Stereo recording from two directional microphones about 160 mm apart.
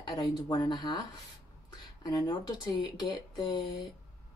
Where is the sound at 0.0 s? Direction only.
30° left (ahead or behind).